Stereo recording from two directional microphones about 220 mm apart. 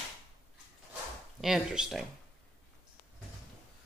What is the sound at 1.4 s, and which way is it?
Speech, 5° right (ahead or behind).